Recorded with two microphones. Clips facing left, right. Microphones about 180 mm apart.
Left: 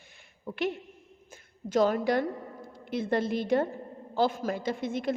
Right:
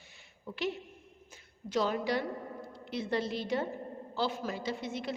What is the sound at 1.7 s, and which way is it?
A woman's voice, 50° left (ahead or behind).